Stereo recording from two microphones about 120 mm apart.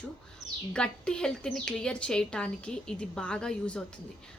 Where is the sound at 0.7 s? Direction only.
5° left (ahead or behind).